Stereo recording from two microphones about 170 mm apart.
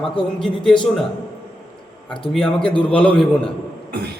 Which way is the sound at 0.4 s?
5° left (ahead or behind).